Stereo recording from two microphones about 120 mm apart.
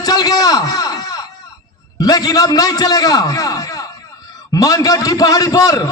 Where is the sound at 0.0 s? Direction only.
30° left (ahead or behind).